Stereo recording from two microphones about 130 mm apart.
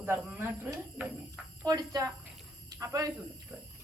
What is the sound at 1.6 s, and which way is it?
Speech, 30° right (ahead or behind).